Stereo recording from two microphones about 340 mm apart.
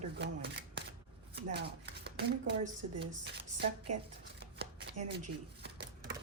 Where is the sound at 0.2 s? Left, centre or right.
Right.